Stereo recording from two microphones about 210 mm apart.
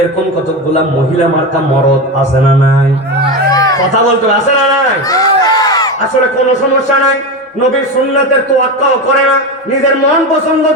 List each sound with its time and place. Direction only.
3.5 s music: 15° left (ahead or behind)
5.1 s crowd: 15° left (ahead or behind)